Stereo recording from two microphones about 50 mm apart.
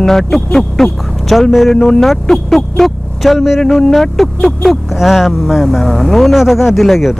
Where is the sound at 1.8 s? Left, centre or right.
Centre.